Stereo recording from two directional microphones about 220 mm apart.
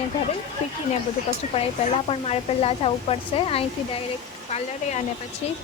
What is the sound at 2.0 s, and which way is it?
Speech, 25° left (ahead or behind).